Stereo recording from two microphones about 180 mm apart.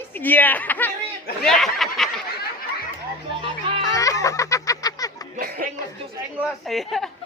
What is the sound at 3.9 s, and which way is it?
Music, 20° left (ahead or behind).